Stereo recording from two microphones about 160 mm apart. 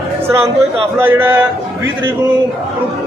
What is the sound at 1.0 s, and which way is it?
Speech, 15° right (ahead or behind).